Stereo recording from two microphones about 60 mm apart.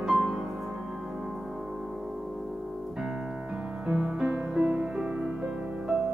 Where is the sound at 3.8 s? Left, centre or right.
Centre.